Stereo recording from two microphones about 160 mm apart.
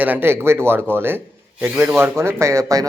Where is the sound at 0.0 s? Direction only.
10° right (ahead or behind).